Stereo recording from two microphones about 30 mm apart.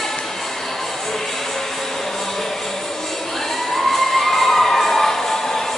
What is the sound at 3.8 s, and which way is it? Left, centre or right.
Crowd, centre.